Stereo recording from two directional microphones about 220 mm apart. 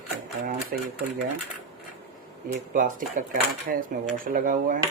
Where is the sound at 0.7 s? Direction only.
40° right (ahead or behind).